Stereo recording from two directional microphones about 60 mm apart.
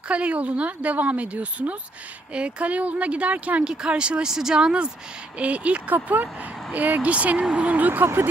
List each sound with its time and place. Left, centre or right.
0.1 s speech: right
8.0 s speech: right